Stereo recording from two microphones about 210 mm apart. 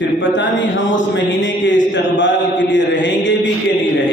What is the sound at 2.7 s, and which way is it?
Mantra, 60° left (ahead or behind).